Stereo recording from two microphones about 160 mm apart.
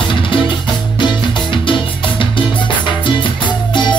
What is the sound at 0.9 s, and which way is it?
Music, 30° left (ahead or behind).